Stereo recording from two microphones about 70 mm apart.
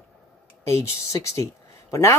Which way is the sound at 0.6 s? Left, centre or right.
Left.